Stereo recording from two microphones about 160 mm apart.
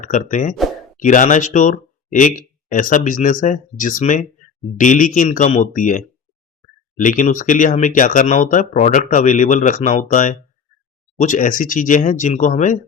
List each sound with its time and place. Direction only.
0.0 s speech: 50° left (ahead or behind)